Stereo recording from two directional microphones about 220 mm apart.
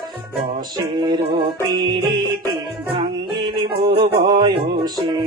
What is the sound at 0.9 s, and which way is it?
Music, 20° right (ahead or behind).